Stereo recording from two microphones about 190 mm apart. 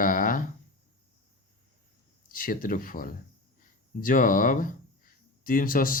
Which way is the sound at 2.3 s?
45° left (ahead or behind).